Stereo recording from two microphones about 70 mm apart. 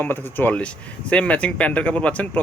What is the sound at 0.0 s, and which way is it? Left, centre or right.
Speech, left.